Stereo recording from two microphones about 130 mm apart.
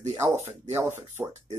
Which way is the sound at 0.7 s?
20° right (ahead or behind).